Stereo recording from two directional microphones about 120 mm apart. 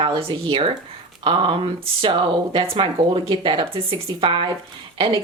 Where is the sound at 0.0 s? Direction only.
45° right (ahead or behind).